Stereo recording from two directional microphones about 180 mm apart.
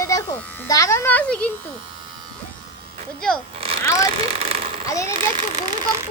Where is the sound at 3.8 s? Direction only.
15° left (ahead or behind).